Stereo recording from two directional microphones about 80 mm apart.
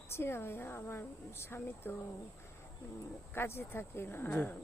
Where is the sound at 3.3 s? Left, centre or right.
Left.